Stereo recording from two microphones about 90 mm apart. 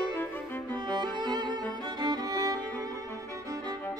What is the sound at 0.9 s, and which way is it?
Music, 55° right (ahead or behind).